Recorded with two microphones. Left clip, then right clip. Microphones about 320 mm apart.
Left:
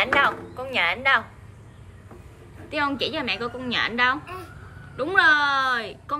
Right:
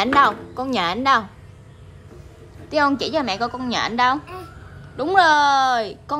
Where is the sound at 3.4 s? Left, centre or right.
Centre.